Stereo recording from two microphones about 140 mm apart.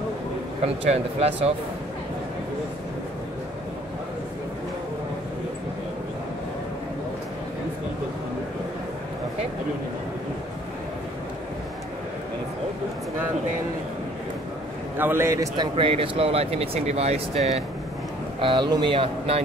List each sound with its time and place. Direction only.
0.8 s speech: 45° right (ahead or behind)
15.0 s a man's voice: 15° right (ahead or behind)
15.7 s speech: 40° right (ahead or behind)
18.4 s speech: 35° right (ahead or behind)